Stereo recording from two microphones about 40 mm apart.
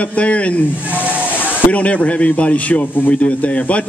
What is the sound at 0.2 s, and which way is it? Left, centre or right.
Speech, left.